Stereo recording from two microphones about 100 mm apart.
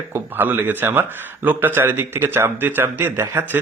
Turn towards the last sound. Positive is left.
turn(degrees=-20)  # may be behind; listen again after turning